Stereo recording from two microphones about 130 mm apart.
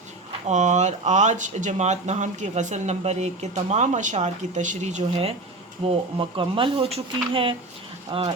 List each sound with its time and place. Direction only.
0.4 s speech: 65° right (ahead or behind)
5.8 s speech: 45° right (ahead or behind)